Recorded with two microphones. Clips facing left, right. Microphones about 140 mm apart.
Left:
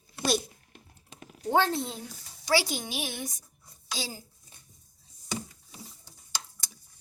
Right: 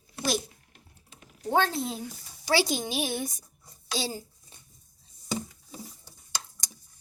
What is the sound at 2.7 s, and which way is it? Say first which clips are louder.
Speech: right 5 dB; 30° right (ahead or behind).